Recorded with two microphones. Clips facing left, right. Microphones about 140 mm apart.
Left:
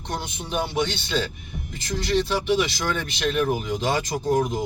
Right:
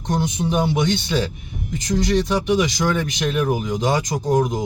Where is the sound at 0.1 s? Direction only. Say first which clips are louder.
Right 8 dB; 15° right (ahead or behind).